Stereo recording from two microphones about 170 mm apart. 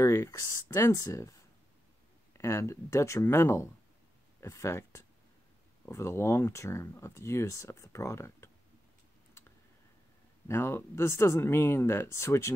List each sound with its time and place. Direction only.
0.0 s speech: 15° left (ahead or behind)
10.5 s speech: 15° left (ahead or behind)